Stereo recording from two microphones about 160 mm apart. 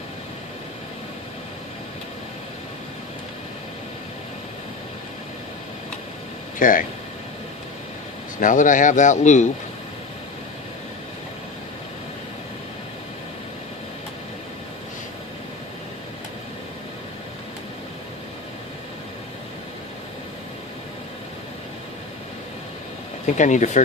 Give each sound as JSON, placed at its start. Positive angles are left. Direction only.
{"t": 6.6, "sound": "speech", "side_deg": 60}
{"t": 8.4, "sound": "speech", "side_deg": 55}
{"t": 23.2, "sound": "speech", "side_deg": 50}